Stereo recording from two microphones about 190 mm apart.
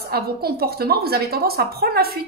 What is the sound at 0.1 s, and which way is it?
A woman's voice, 55° right (ahead or behind).